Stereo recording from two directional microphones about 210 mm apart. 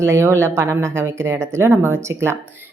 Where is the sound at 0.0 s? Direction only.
10° right (ahead or behind).